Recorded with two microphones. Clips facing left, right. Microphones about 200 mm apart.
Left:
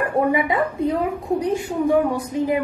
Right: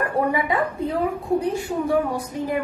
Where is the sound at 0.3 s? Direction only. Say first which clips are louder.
Left 2 dB; 20° left (ahead or behind).